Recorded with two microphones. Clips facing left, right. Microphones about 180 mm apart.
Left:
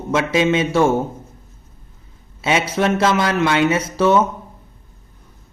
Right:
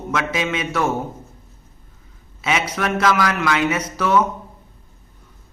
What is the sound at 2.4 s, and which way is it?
Speech, 30° left (ahead or behind).